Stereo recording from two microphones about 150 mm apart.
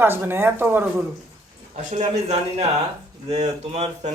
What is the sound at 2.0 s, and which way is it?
A man's voice, 45° right (ahead or behind).